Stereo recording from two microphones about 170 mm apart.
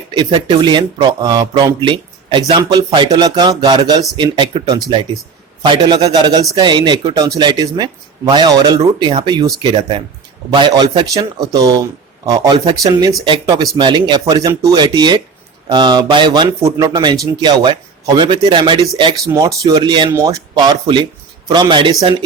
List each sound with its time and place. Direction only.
0.1 s a man's voice: 30° right (ahead or behind)
10.5 s a man's voice: 25° right (ahead or behind)